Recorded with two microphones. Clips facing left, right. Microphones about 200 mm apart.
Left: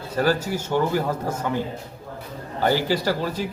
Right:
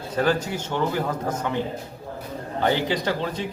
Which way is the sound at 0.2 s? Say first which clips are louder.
Left 1 dB; 10° left (ahead or behind).